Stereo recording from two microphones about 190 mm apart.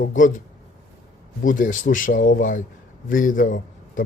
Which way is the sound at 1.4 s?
45° left (ahead or behind).